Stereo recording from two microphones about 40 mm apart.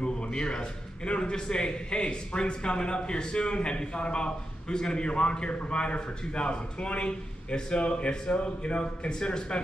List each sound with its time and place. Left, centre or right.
0.0 s a man's voice: left